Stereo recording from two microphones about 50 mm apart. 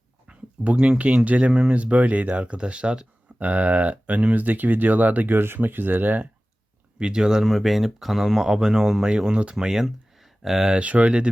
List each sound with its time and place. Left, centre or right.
0.3 s speech: right
7.0 s speech: centre
7.4 s speech: centre
9.6 s speech: centre
10.7 s speech: right